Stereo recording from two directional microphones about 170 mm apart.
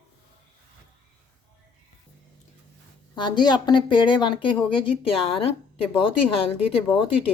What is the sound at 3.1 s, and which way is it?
A woman's voice, 25° left (ahead or behind).